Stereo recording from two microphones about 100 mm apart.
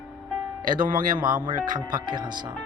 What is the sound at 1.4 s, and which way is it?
Speech, 50° right (ahead or behind).